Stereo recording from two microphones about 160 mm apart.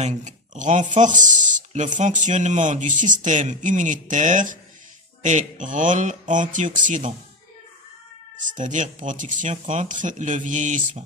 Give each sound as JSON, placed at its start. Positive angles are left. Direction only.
{"t": 0.0, "sound": "speech", "side_deg": -50}
{"t": 8.4, "sound": "speech", "side_deg": -55}